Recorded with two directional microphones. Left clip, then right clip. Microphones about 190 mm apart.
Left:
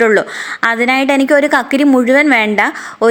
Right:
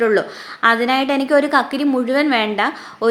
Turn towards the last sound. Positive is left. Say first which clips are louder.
# left 6 dB
turn(degrees=35)  # may be behind; listen again after turning